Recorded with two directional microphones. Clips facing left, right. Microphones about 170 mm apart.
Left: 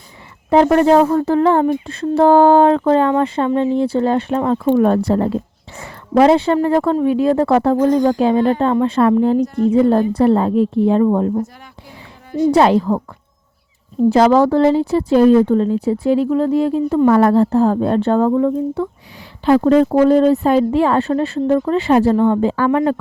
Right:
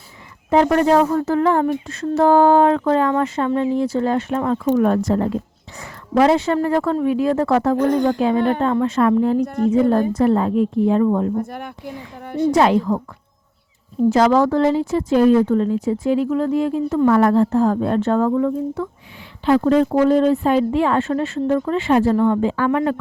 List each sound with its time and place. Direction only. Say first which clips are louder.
0.5 s speech: left 3 dB; 30° left (ahead or behind)
7.8 s a woman's voice: left 3 dB; 60° right (ahead or behind)
8.2 s speech: left 3 dB; 30° left (ahead or behind)
9.4 s a woman's voice: left 3 dB; 60° right (ahead or behind)
10.2 s speech: left 3 dB; 30° left (ahead or behind)
11.4 s a woman's voice: right 8 dB; 55° right (ahead or behind)
12.2 s a sound: left 3 dB; 60° right (ahead or behind)
12.5 s speech: left 3 dB; 30° left (ahead or behind)
14.1 s speech: left 3 dB; 30° left (ahead or behind)
19.5 s speech: left 3 dB; 40° left (ahead or behind)